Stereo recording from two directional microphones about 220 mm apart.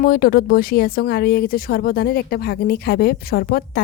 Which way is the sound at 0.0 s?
40° left (ahead or behind).